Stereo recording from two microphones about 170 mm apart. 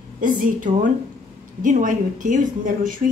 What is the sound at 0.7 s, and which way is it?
Speech, 50° right (ahead or behind).